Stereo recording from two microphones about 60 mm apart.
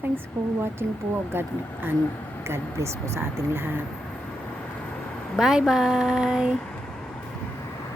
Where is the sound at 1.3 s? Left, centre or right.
Right.